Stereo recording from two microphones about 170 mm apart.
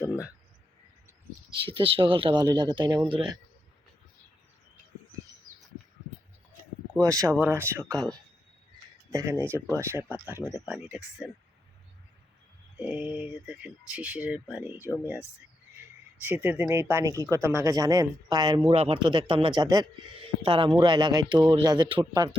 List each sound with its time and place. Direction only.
1.7 s speech: 30° right (ahead or behind)
7.0 s speech: 20° right (ahead or behind)
9.1 s speech: 15° right (ahead or behind)
12.7 s speech: 10° right (ahead or behind)
16.2 s speech: 10° right (ahead or behind); by 22.4 s 25° right (ahead or behind)